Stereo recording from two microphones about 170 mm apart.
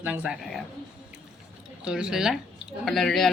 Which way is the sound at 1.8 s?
5° right (ahead or behind).